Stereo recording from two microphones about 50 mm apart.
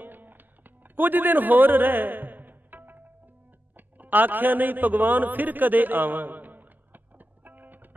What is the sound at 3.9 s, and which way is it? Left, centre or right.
A man's voice, right.